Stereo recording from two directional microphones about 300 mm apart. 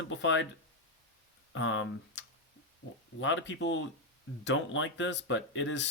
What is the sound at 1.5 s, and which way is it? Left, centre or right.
Speech, left.